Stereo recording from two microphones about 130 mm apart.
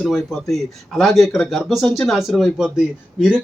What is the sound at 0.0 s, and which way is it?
Speech, centre (ahead or behind).